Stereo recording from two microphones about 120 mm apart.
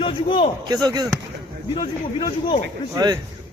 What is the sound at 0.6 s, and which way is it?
Speech, 35° right (ahead or behind).